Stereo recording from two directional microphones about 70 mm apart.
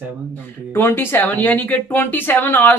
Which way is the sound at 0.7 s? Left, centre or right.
Left.